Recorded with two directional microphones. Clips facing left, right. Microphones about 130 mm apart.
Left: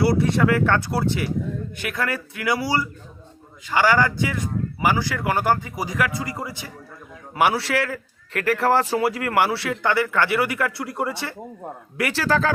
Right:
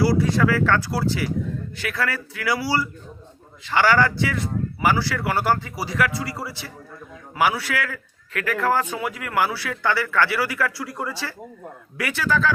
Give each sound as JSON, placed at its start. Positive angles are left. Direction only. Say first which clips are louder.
{"t": 0.0, "sound": "a man's voice", "louder": "even", "side_deg": 25}
{"t": 12.2, "sound": "speech", "louder": "even", "side_deg": 40}